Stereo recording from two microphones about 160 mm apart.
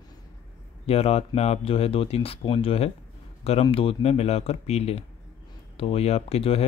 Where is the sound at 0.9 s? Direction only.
40° left (ahead or behind).